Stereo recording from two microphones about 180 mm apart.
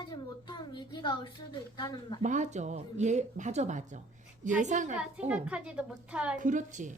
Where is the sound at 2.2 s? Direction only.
45° right (ahead or behind).